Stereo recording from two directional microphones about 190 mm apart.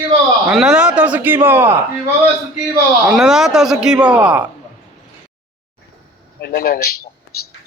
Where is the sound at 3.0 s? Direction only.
5° right (ahead or behind).